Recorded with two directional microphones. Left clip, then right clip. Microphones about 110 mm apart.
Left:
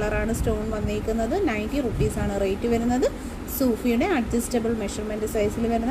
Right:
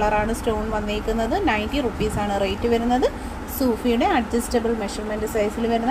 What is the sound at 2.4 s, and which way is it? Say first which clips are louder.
Speech: even; 35° left (ahead or behind).